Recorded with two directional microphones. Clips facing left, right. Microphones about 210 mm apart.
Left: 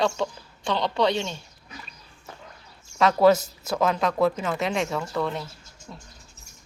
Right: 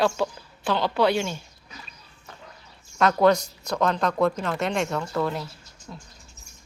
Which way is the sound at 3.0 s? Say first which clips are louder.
Left 1 dB; centre (ahead or behind).